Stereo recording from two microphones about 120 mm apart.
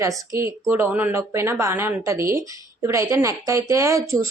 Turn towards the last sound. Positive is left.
turn(degrees=-25)  # may be behind; listen again after turning